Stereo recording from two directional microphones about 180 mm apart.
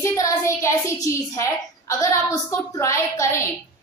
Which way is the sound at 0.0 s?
15° left (ahead or behind).